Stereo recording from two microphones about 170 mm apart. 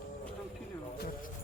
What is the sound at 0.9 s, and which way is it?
Music, 65° left (ahead or behind).